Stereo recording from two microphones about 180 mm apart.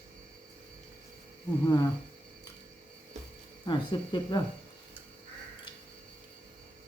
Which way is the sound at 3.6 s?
25° left (ahead or behind).